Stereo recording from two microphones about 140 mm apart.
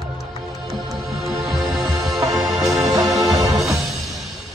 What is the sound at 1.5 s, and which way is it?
Music, centre (ahead or behind).